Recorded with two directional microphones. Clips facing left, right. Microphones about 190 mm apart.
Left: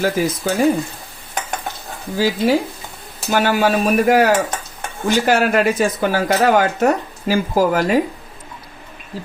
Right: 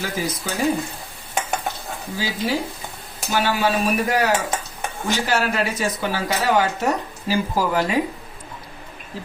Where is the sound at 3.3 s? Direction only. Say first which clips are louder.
Left 4 dB; 50° left (ahead or behind).